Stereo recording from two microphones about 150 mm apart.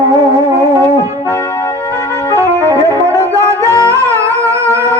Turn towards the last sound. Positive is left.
turn(degrees=-20)  # may be behind; listen again after turning